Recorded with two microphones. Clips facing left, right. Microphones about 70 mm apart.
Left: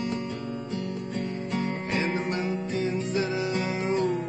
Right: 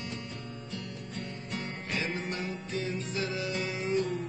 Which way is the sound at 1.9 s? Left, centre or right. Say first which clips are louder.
Left 4 dB; left.